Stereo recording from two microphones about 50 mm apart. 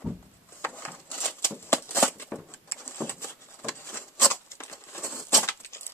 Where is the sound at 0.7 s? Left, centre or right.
Left.